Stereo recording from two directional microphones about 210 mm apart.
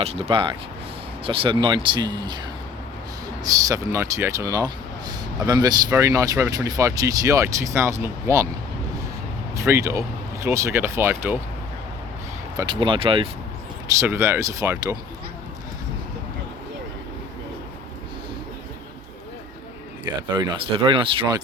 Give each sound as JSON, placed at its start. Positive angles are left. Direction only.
{"t": 0.0, "sound": "speech", "side_deg": -30}
{"t": 3.4, "sound": "speech", "side_deg": -15}
{"t": 9.6, "sound": "speech", "side_deg": -15}
{"t": 12.5, "sound": "speech", "side_deg": -20}
{"t": 14.0, "sound": "speech", "side_deg": -10}
{"t": 20.3, "sound": "speech", "side_deg": -25}